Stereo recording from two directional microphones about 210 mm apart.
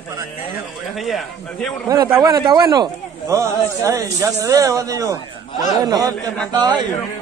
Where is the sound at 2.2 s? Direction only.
20° right (ahead or behind).